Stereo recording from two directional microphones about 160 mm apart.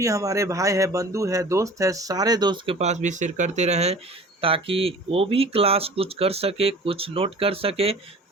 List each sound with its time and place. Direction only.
0.0 s speech: 20° right (ahead or behind)
2.7 s speech: 45° right (ahead or behind)